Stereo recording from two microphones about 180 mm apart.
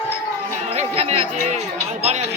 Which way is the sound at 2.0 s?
35° right (ahead or behind).